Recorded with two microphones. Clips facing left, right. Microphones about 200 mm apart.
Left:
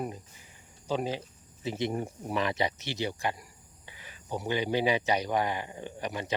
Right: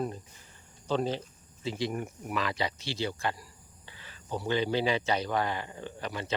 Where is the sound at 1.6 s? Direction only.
20° left (ahead or behind).